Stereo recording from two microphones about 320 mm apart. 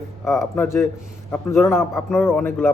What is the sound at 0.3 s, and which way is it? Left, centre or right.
Speech, centre.